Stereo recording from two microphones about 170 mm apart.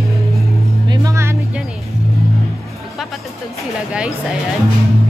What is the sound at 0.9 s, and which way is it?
Speech, 20° right (ahead or behind).